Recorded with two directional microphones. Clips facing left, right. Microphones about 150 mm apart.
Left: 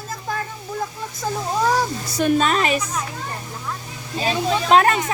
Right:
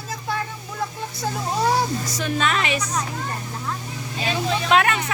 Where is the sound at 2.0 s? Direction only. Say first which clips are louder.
Left 7 dB; 60° left (ahead or behind).